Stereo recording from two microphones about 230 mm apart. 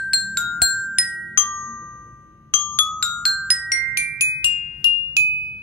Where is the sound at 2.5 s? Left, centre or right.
Centre.